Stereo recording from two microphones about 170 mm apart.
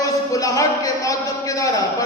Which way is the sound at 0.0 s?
20° left (ahead or behind).